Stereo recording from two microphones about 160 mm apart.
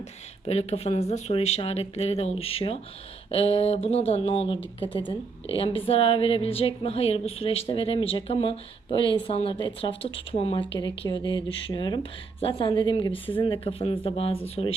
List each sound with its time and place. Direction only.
0.4 s a woman's voice: 40° left (ahead or behind)